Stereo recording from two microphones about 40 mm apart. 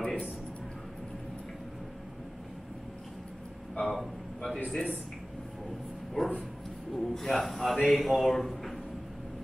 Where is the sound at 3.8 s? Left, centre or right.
Centre.